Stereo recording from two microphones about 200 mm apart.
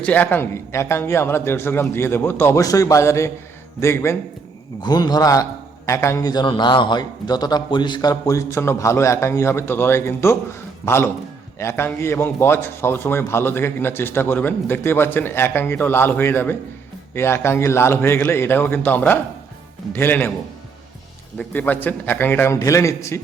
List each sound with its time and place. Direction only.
0.0 s a man's voice: 10° left (ahead or behind)
21.3 s a man's voice: 10° left (ahead or behind)